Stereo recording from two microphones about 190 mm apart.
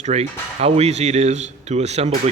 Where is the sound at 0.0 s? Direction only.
35° right (ahead or behind).